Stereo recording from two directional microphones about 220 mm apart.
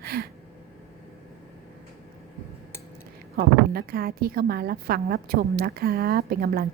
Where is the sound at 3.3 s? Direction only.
45° right (ahead or behind).